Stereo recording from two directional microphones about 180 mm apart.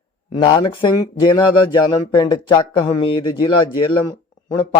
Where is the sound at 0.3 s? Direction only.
25° left (ahead or behind).